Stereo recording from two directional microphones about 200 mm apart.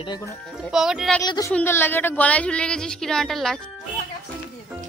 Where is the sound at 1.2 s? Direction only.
20° left (ahead or behind); by 3.6 s centre (ahead or behind).